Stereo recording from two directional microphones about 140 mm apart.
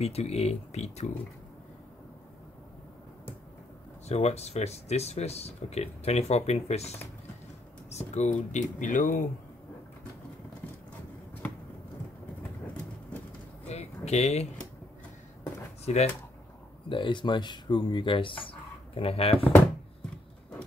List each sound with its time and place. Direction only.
0.0 s speech: 50° left (ahead or behind)
4.1 s speech: 50° left (ahead or behind); by 9.2 s 70° left (ahead or behind)
13.7 s a sound: 50° left (ahead or behind)
15.8 s speech: 50° left (ahead or behind)
16.9 s speech: 35° left (ahead or behind)